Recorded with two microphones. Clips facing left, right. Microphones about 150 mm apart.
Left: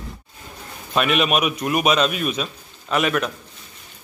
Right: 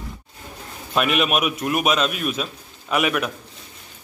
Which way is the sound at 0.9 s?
Centre (ahead or behind).